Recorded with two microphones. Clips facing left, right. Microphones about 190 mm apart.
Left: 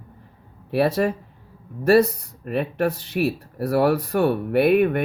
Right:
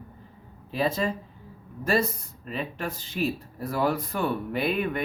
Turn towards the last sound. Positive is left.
turn(degrees=65)  # may be behind; listen again after turning